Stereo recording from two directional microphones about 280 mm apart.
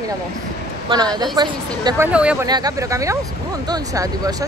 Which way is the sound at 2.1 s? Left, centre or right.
Centre.